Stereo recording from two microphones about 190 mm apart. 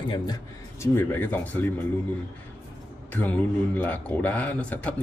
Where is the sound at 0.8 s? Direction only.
10° left (ahead or behind).